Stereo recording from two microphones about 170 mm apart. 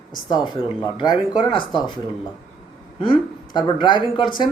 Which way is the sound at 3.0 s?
30° left (ahead or behind).